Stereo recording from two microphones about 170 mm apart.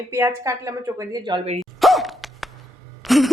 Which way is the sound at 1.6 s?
Centre (ahead or behind).